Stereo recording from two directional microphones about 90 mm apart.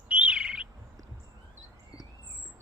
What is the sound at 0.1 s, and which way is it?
Bird, 15° right (ahead or behind).